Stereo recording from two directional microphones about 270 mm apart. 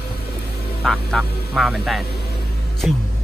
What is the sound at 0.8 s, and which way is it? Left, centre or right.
Music, centre.